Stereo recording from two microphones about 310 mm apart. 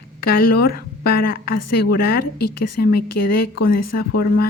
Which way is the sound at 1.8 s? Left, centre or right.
Left.